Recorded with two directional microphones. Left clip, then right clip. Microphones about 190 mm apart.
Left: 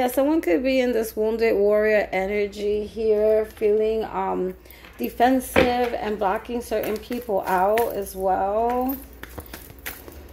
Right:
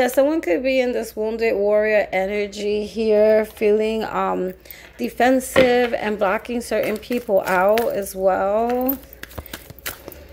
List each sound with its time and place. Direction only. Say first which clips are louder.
0.0 s a woman's voice: right 3 dB; 20° right (ahead or behind)